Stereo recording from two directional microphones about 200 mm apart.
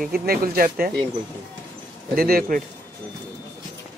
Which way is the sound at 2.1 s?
45° right (ahead or behind).